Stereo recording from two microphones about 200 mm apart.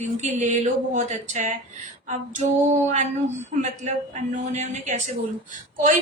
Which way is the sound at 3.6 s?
35° right (ahead or behind).